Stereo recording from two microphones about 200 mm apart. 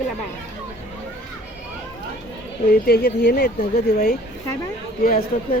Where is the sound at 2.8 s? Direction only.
55° left (ahead or behind).